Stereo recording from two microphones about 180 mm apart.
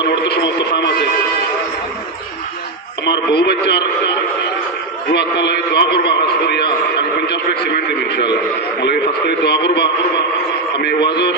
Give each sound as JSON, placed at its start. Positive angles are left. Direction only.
{"t": 0.3, "sound": "a man's voice", "side_deg": 70}
{"t": 3.1, "sound": "a man's voice", "side_deg": 65}
{"t": 5.1, "sound": "a man's voice", "side_deg": 70}